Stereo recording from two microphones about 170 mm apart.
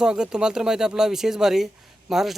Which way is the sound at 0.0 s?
5° right (ahead or behind).